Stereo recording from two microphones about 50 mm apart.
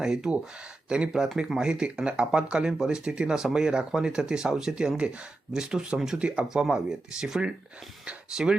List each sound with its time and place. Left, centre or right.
0.0 s speech: centre